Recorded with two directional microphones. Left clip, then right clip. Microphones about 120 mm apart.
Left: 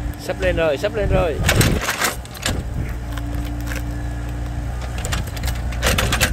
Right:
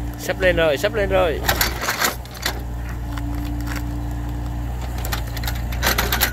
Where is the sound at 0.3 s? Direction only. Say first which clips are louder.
Right 2 dB; 15° right (ahead or behind).